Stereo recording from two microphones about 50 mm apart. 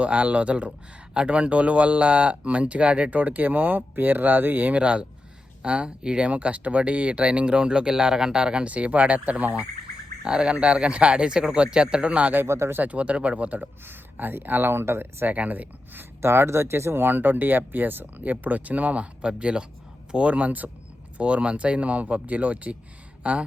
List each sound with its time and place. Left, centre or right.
0.0 s speech: right
4.8 s speech: right
12.5 s speech: right
12.7 s speech: right
13.8 s speech: right
15.3 s speech: right
16.2 s speech: right
17.0 s speech: right